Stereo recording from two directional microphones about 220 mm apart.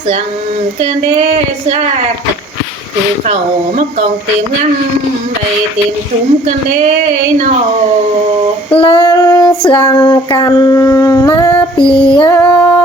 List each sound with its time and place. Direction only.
6.4 s speech: 35° right (ahead or behind)
8.7 s child singing: 25° left (ahead or behind)
11.8 s female singing: 20° left (ahead or behind)
12.3 s female singing: 10° left (ahead or behind)